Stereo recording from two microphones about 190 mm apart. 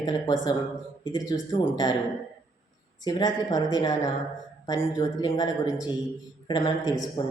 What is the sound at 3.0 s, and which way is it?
Speech, 20° left (ahead or behind).